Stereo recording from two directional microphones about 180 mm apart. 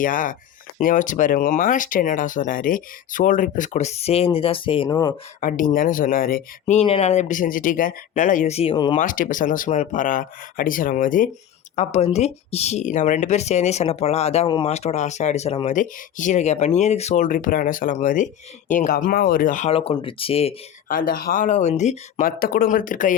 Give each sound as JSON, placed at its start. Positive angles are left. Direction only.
{"t": 0.0, "sound": "speech", "side_deg": 50}
{"t": 4.9, "sound": "speech", "side_deg": 20}
{"t": 5.4, "sound": "speech", "side_deg": 50}
{"t": 6.7, "sound": "speech", "side_deg": 35}
{"t": 9.0, "sound": "speech", "side_deg": 50}
{"t": 11.8, "sound": "speech", "side_deg": 35}
{"t": 19.7, "sound": "speech", "side_deg": 30}
{"t": 20.8, "sound": "speech", "side_deg": 50}